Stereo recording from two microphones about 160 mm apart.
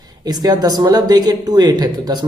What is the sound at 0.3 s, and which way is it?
Speech, 25° right (ahead or behind).